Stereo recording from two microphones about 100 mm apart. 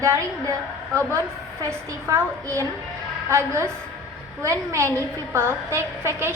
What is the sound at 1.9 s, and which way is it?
A woman's voice, 30° right (ahead or behind).